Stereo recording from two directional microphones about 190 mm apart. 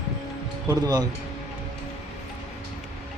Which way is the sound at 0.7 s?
20° right (ahead or behind).